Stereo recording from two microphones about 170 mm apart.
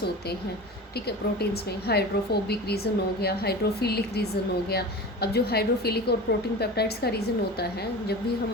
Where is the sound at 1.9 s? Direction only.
70° left (ahead or behind).